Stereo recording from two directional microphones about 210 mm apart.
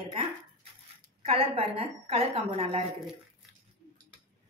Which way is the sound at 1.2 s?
25° right (ahead or behind).